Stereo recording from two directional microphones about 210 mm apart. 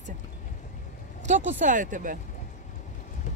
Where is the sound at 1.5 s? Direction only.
40° right (ahead or behind).